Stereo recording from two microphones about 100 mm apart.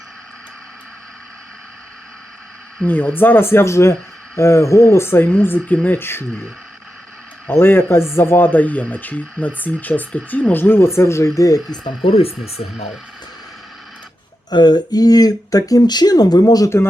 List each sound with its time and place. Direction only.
2.8 s speech: 20° left (ahead or behind)
7.4 s speech: 20° left (ahead or behind)
11.8 s speech: 65° left (ahead or behind); by 12.9 s 90° left
14.5 s speech: 45° left (ahead or behind)
16.6 s speech: 25° left (ahead or behind)